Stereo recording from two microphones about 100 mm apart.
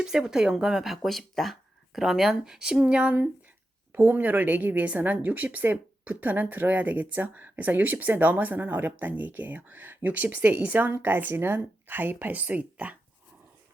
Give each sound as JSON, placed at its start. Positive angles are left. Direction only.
{"t": 0.0, "sound": "a woman's voice", "side_deg": -5}